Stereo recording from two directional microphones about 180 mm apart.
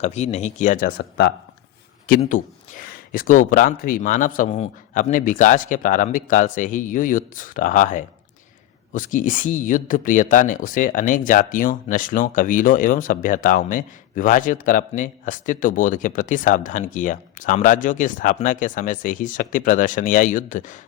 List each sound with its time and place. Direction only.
0.0 s speech: 40° left (ahead or behind); by 1.3 s 65° left (ahead or behind)
2.0 s speech: 45° left (ahead or behind)